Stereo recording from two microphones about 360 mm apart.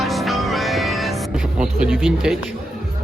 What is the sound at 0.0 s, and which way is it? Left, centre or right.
Music, centre.